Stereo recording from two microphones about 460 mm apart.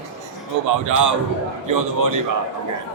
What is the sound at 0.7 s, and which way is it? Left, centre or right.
A man's voice, right.